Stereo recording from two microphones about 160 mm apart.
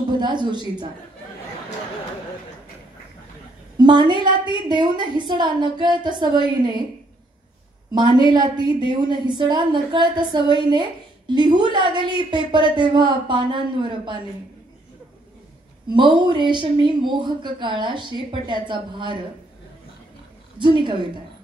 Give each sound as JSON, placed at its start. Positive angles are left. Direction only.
{"t": 0.2, "sound": "a woman's voice", "side_deg": -30}
{"t": 3.7, "sound": "a woman's voice", "side_deg": -25}
{"t": 8.3, "sound": "a woman's voice", "side_deg": -25}
{"t": 15.9, "sound": "a woman's voice", "side_deg": -30}
{"t": 20.5, "sound": "a woman's voice", "side_deg": -30}